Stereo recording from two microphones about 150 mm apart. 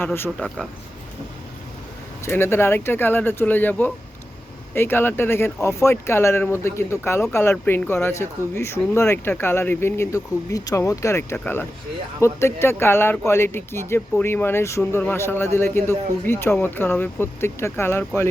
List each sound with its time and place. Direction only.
0.0 s speech: 15° left (ahead or behind)
0.3 s speech: centre (ahead or behind)
2.2 s speech: 15° left (ahead or behind)